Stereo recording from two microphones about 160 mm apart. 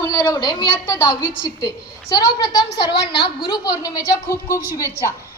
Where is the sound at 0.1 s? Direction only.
25° left (ahead or behind).